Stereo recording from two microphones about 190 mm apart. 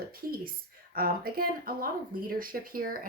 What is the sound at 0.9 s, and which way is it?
Speech, 50° right (ahead or behind).